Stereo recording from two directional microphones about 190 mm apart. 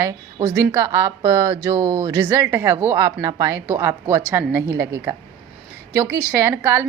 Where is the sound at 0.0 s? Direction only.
15° right (ahead or behind).